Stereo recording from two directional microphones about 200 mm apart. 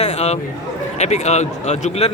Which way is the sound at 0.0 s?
35° left (ahead or behind).